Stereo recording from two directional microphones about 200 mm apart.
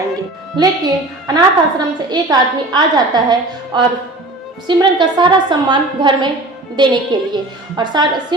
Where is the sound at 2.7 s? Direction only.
20° right (ahead or behind).